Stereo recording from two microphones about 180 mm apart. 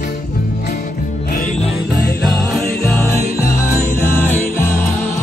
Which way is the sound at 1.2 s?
55° left (ahead or behind).